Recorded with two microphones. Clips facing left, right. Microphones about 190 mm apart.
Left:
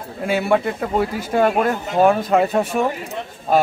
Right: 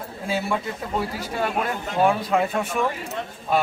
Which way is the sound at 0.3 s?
65° left (ahead or behind).